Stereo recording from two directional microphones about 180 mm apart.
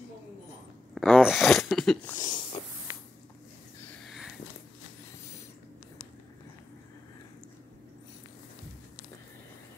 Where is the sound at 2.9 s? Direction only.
15° right (ahead or behind).